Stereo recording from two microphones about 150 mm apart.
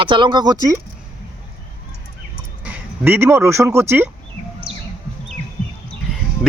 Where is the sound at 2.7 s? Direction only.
10° right (ahead or behind).